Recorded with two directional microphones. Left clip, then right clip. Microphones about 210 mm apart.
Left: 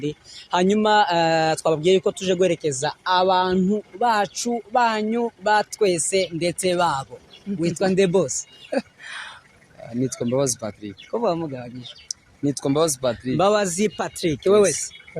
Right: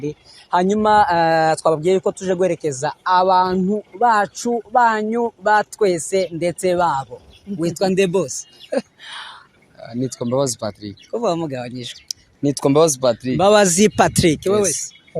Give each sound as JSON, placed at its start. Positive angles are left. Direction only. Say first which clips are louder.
{"t": 0.0, "sound": "speech", "louder": "right 1 dB", "side_deg": 0}
{"t": 8.7, "sound": "a sound", "louder": "right 3 dB", "side_deg": -20}
{"t": 9.8, "sound": "speech", "louder": "right 1 dB", "side_deg": -20}
{"t": 11.3, "sound": "speech", "louder": "right 5 dB", "side_deg": -50}
{"t": 12.4, "sound": "speech", "louder": "right 6 dB", "side_deg": -25}
{"t": 13.5, "sound": "speech", "louder": "right 7 dB", "side_deg": -40}
{"t": 14.5, "sound": "speech", "louder": "left 1 dB", "side_deg": 5}